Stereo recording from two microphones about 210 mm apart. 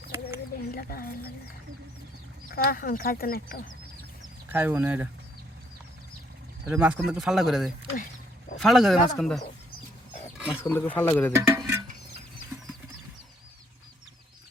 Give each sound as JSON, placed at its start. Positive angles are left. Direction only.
{"t": 0.7, "sound": "speech", "side_deg": 45}
{"t": 2.5, "sound": "speech", "side_deg": 45}
{"t": 4.4, "sound": "speech", "side_deg": -10}
{"t": 6.7, "sound": "speech", "side_deg": -5}
{"t": 7.9, "sound": "a sound", "side_deg": 40}
{"t": 8.5, "sound": "speech", "side_deg": 0}
{"t": 10.3, "sound": "roaring cats", "side_deg": -5}
{"t": 10.6, "sound": "speech", "side_deg": 10}
{"t": 11.3, "sound": "music", "side_deg": -10}